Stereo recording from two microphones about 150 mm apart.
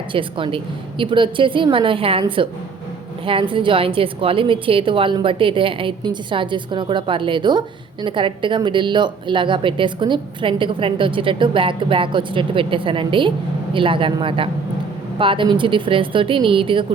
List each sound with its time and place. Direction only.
0.1 s speech: 35° right (ahead or behind)